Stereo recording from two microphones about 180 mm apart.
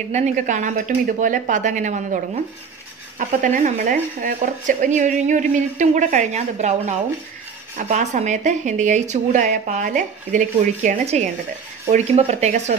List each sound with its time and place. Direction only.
0.1 s speech: 45° right (ahead or behind)
3.2 s speech: 45° right (ahead or behind)